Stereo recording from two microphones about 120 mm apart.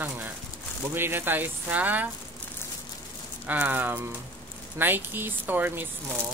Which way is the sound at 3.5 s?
15° right (ahead or behind).